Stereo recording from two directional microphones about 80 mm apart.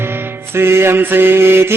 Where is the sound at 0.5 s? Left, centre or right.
Right.